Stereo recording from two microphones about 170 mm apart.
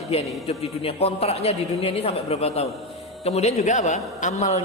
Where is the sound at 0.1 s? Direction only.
40° left (ahead or behind).